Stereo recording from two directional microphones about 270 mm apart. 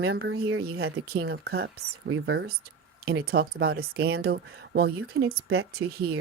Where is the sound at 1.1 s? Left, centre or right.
Right.